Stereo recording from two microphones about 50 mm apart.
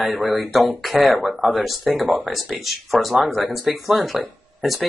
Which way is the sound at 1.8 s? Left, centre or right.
Centre.